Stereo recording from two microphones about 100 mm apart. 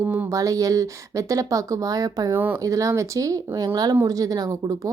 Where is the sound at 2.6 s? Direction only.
35° right (ahead or behind).